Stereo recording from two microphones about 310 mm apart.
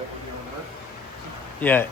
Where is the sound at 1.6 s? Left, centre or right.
Centre.